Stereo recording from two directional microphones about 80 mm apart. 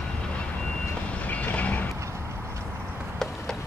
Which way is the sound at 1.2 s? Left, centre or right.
Centre.